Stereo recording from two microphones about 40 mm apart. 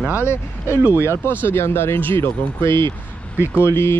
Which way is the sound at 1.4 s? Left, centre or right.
Left.